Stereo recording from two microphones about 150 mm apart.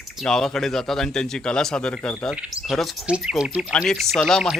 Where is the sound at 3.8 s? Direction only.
Centre (ahead or behind).